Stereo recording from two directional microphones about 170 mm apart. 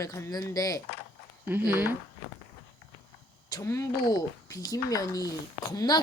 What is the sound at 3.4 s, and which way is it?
Speech, 20° left (ahead or behind).